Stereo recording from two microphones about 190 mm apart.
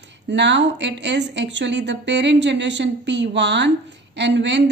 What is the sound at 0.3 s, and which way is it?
A woman's voice, 70° right (ahead or behind).